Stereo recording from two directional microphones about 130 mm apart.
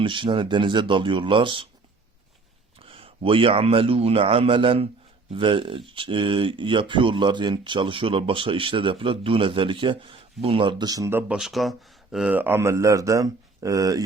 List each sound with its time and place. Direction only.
0.0 s speech: 40° right (ahead or behind)
2.7 s a man's voice: 45° right (ahead or behind); by 11.1 s 30° right (ahead or behind)
11.1 s speech: 15° right (ahead or behind)
11.3 s speech: centre (ahead or behind)
12.4 s speech: 20° right (ahead or behind)